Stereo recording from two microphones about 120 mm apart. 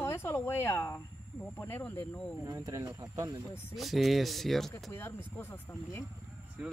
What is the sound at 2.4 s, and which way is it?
Speech, 25° right (ahead or behind).